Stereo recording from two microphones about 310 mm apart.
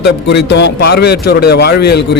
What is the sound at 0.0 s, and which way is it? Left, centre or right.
A man's voice, left.